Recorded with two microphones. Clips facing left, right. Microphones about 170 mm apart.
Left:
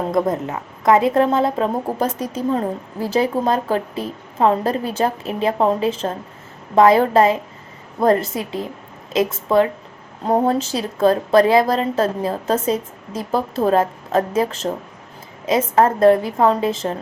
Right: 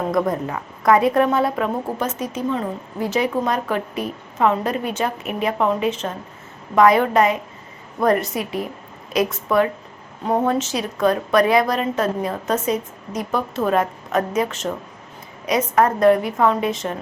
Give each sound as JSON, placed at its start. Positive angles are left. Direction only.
{"t": 0.1, "sound": "a woman's voice", "side_deg": 25}